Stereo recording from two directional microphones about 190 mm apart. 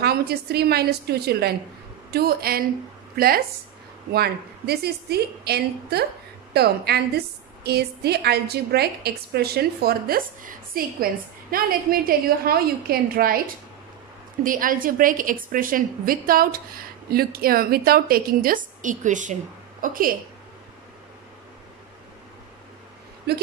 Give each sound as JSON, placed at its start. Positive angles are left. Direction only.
{"t": 0.0, "sound": "a woman's voice", "side_deg": -55}
{"t": 14.4, "sound": "a woman's voice", "side_deg": -45}
{"t": 23.3, "sound": "a woman's voice", "side_deg": -55}